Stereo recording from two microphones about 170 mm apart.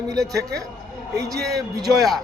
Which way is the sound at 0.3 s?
20° right (ahead or behind).